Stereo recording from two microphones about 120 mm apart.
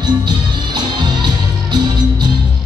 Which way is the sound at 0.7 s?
40° right (ahead or behind).